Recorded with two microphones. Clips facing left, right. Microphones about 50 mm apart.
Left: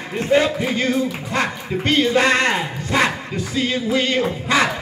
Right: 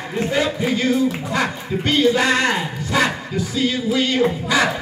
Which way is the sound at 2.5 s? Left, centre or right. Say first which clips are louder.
Even; left.